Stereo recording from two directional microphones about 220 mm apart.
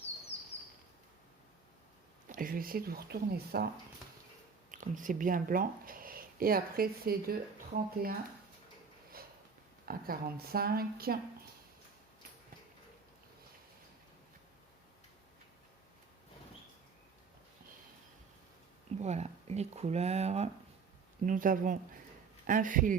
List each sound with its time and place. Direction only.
2.3 s speech: 40° right (ahead or behind)
4.7 s speech: 35° right (ahead or behind)
9.8 s speech: 40° right (ahead or behind)
18.9 s speech: 30° right (ahead or behind)